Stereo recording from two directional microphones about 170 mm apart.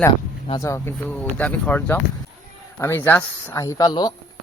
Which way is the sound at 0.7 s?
15° left (ahead or behind).